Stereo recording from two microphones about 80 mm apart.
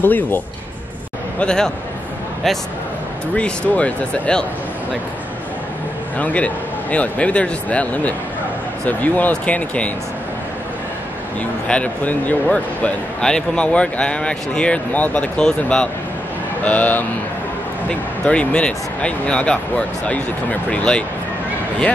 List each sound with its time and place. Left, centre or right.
0.0 s speech: left
1.4 s speech: centre
3.3 s speech: centre
6.1 s speech: centre
11.6 s speech: centre
20.7 s speech: centre